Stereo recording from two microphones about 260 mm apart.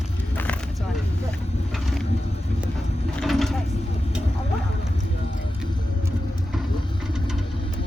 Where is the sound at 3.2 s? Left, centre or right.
Centre.